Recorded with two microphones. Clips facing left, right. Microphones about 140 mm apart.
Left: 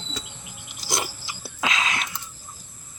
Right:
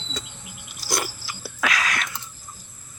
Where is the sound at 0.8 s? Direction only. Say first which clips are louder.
Right 1 dB; 20° left (ahead or behind).